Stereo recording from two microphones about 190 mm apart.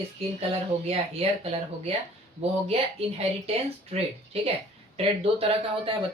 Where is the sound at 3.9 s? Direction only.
30° right (ahead or behind).